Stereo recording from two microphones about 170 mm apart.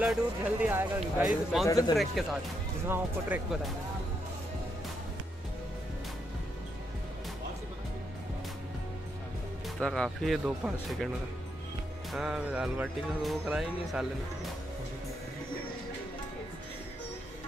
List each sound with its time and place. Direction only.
0.0 s speech: 5° right (ahead or behind)
1.7 s speech: 20° left (ahead or behind)
2.2 s speech: centre (ahead or behind)
9.8 s speech: 5° left (ahead or behind)
12.1 s speech: 5° right (ahead or behind)